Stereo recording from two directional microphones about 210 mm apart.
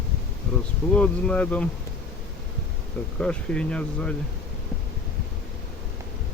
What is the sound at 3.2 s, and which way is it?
Speech, 5° left (ahead or behind).